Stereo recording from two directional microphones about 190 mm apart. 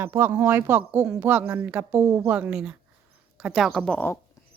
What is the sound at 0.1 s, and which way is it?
Speech, 15° right (ahead or behind).